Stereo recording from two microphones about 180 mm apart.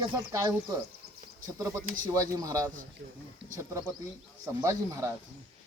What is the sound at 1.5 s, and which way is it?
Speech, 20° right (ahead or behind).